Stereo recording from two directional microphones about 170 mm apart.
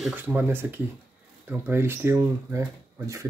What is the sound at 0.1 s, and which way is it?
Speech, 10° right (ahead or behind).